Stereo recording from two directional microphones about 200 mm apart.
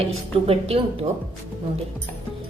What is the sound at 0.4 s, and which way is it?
Speech, 30° right (ahead or behind).